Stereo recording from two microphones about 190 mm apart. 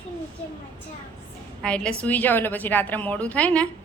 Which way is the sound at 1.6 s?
5° left (ahead or behind).